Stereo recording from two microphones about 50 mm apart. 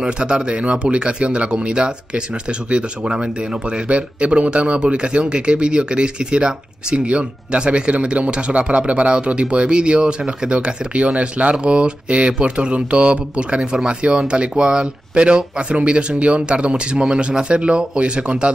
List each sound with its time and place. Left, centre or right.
0.0 s speech: centre